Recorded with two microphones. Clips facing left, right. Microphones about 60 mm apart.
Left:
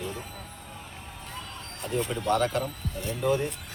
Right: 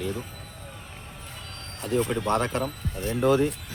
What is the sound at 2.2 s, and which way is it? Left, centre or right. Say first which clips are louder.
Speech: even; right.